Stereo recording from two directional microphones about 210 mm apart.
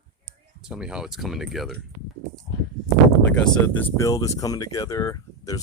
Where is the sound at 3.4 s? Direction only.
5° left (ahead or behind).